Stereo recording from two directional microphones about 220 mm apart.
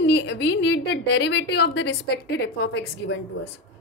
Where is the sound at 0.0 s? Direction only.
50° left (ahead or behind).